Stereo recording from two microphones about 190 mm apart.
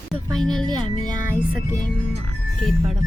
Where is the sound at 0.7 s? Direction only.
20° right (ahead or behind).